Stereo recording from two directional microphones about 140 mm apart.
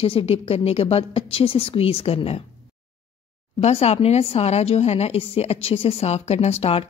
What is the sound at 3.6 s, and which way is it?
A woman's voice, 50° left (ahead or behind).